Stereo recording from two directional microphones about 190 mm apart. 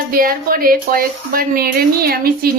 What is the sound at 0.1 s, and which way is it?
Speech, 50° right (ahead or behind).